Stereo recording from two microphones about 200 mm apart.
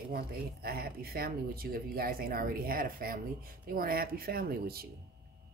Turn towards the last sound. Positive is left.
turn(degrees=-50)  # may be behind; listen again after turning